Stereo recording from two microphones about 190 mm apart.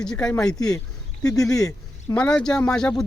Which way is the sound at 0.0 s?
5° left (ahead or behind).